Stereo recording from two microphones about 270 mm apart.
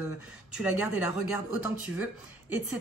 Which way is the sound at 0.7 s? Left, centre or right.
Left.